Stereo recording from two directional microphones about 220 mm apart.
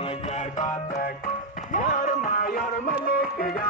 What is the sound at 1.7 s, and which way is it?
Music, 35° left (ahead or behind).